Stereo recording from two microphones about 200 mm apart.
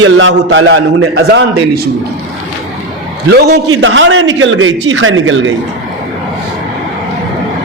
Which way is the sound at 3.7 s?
75° right (ahead or behind).